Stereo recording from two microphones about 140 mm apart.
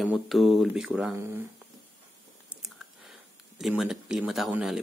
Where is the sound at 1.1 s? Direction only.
20° right (ahead or behind).